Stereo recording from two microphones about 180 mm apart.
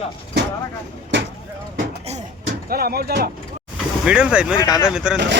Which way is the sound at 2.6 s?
60° right (ahead or behind).